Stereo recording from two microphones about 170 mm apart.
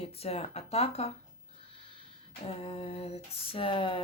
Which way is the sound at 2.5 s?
35° left (ahead or behind).